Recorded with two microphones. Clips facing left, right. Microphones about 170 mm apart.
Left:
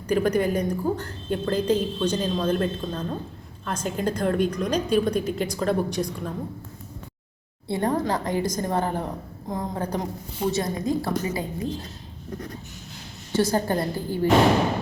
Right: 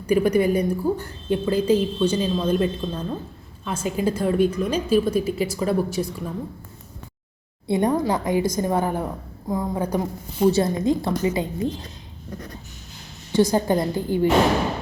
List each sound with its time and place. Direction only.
0.1 s a woman's voice: 10° right (ahead or behind)
7.7 s a woman's voice: 15° right (ahead or behind)
10.4 s a woman's voice: 30° right (ahead or behind)
13.3 s a woman's voice: 15° right (ahead or behind)